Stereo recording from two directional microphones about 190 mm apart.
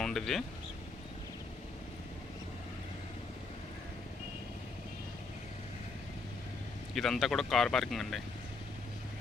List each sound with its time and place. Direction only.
0.0 s speech: centre (ahead or behind)
6.9 s speech: centre (ahead or behind)